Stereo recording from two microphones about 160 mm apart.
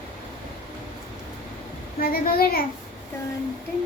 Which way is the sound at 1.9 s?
70° left (ahead or behind).